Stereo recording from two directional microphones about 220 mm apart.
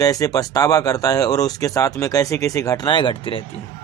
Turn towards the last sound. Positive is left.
turn(degrees=25)  # may be behind; listen again after turning